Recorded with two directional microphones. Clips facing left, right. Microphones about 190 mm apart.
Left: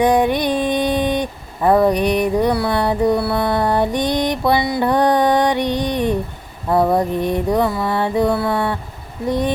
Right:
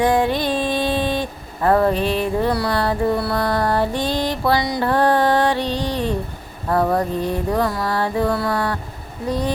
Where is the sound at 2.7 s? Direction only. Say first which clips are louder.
Left 3 dB; 20° left (ahead or behind).